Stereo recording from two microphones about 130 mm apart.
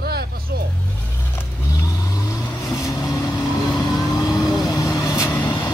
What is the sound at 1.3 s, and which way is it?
Vehicle, 25° left (ahead or behind).